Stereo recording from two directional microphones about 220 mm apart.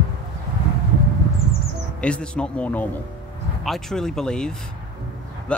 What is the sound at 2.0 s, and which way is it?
Speech, 5° left (ahead or behind).